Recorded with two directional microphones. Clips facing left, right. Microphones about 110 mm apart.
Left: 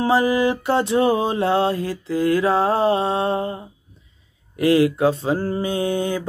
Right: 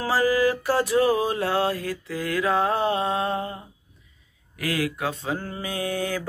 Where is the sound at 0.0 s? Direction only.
20° left (ahead or behind).